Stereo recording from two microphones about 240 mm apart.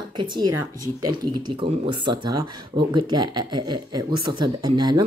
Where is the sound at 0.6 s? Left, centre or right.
Right.